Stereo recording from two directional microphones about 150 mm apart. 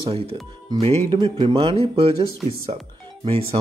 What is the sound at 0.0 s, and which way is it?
Speech, 40° right (ahead or behind).